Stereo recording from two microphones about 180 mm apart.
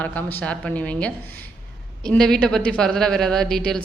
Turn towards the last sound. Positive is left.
turn(degrees=5)  # may be behind; listen again after turning